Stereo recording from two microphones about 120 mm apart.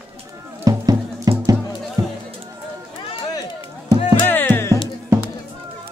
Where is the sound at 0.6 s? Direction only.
30° right (ahead or behind).